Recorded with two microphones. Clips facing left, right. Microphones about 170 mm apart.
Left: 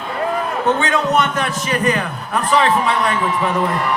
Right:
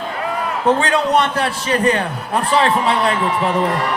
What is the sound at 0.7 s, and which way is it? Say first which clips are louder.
A man's voice: right 2 dB; 30° right (ahead or behind).